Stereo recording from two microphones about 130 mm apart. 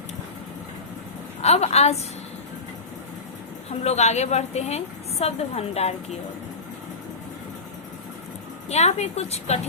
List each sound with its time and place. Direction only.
1.4 s a woman's voice: 55° left (ahead or behind)
3.7 s a woman's voice: 55° left (ahead or behind)
8.7 s a woman's voice: 55° left (ahead or behind)